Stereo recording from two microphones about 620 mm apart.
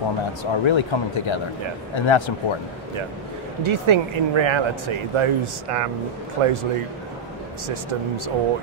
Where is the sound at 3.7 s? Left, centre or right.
Right.